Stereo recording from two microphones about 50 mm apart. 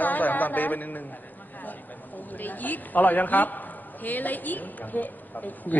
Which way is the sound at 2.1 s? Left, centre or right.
Left.